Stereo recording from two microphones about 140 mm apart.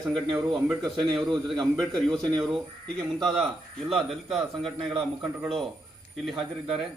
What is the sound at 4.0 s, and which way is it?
Speech, centre (ahead or behind).